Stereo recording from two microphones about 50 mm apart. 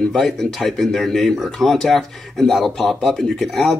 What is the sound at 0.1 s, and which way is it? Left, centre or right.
Speech, centre.